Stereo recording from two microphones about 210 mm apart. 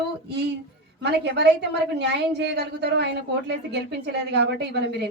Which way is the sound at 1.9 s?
55° right (ahead or behind).